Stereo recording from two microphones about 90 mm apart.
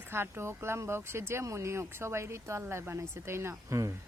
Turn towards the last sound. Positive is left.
turn(degrees=-35)  # may be behind; listen again after turning